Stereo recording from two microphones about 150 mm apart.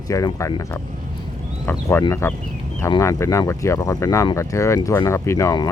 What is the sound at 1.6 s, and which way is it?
Speech, 15° left (ahead or behind).